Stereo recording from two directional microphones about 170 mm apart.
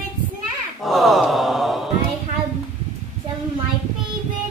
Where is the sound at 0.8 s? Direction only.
Centre (ahead or behind).